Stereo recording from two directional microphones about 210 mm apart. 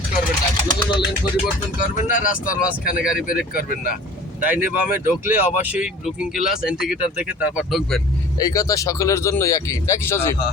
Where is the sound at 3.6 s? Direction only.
45° left (ahead or behind).